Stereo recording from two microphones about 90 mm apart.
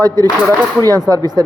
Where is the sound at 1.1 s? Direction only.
45° right (ahead or behind).